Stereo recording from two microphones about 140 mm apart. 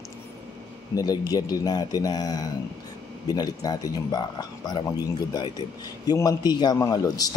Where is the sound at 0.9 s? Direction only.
25° left (ahead or behind).